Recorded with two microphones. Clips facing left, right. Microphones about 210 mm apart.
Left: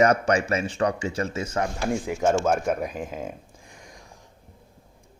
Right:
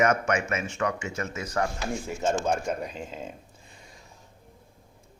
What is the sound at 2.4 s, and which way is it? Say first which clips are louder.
Speech: left 4 dB; 55° left (ahead or behind).